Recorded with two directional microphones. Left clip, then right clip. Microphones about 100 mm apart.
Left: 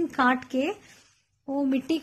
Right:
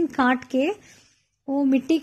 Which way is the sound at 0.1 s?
30° right (ahead or behind).